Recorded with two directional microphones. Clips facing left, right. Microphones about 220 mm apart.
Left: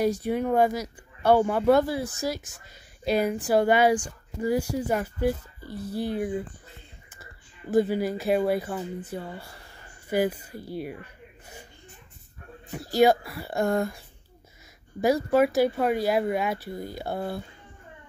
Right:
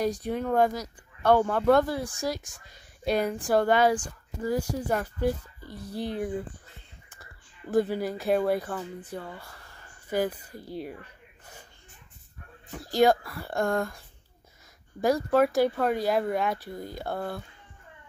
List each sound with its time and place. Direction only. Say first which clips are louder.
0.0 s speech: left 3 dB; 10° left (ahead or behind)
7.7 s speech: left 2 dB; 5° left (ahead or behind)
12.7 s speech: left 2 dB; 5° left (ahead or behind)